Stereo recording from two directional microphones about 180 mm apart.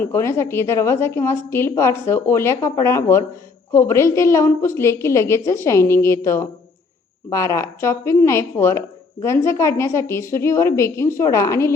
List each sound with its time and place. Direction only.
0.0 s a woman's voice: 15° left (ahead or behind)